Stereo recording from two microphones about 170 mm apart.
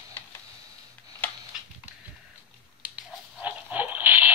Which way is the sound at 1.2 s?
10° left (ahead or behind).